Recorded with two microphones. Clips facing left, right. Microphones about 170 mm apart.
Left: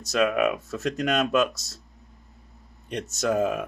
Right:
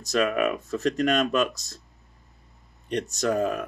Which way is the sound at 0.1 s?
Centre (ahead or behind).